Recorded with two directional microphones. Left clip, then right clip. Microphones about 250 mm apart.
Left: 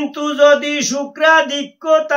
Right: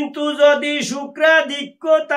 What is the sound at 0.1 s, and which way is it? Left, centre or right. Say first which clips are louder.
Speech: left 3 dB; centre.